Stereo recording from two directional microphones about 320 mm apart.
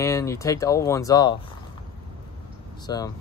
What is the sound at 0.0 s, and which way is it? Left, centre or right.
Speech, centre.